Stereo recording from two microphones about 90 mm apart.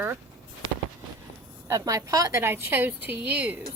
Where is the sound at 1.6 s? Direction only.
40° right (ahead or behind); by 3.6 s 20° right (ahead or behind).